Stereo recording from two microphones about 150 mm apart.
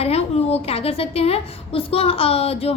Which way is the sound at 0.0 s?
45° left (ahead or behind).